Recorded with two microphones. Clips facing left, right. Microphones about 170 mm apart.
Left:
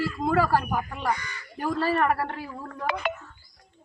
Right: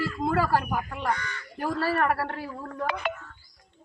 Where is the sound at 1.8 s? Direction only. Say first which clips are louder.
Left 2 dB; 15° left (ahead or behind).